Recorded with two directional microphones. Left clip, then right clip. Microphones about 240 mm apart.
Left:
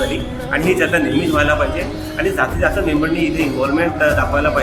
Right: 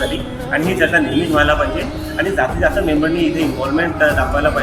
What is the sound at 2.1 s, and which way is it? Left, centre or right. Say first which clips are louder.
Speech: right 1 dB; centre.